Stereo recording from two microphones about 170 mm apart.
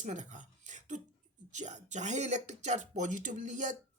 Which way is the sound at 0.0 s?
45° right (ahead or behind).